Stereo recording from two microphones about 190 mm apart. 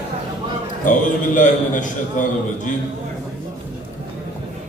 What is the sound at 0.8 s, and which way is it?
A man's voice, 40° left (ahead or behind).